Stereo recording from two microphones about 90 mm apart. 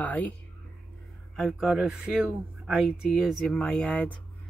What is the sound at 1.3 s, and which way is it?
Speech, 5° right (ahead or behind).